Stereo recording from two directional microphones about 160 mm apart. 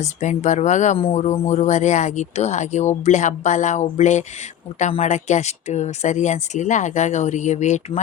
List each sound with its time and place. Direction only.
0.0 s speech: 50° left (ahead or behind)
0.9 s speech: 40° left (ahead or behind)